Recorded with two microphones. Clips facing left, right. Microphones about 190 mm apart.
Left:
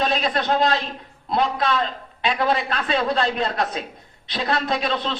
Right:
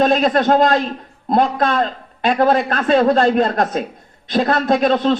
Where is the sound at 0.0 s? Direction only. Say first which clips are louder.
Right 8 dB; 50° right (ahead or behind).